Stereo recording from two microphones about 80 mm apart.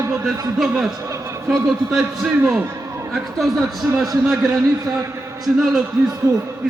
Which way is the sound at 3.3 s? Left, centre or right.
Centre.